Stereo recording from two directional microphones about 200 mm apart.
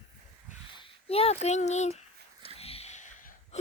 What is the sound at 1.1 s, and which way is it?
Speech, 30° left (ahead or behind).